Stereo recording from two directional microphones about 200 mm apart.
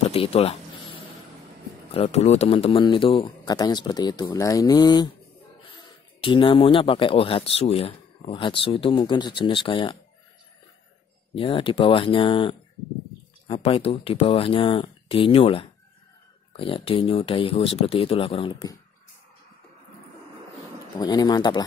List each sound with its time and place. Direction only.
0.1 s speech: 30° left (ahead or behind)
2.0 s speech: 30° left (ahead or behind)
11.3 s speech: 25° left (ahead or behind)
21.0 s speech: 20° left (ahead or behind)